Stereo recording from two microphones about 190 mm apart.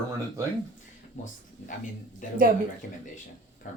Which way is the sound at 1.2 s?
40° left (ahead or behind).